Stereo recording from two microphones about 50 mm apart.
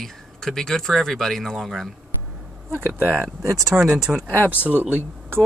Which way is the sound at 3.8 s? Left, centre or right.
Centre.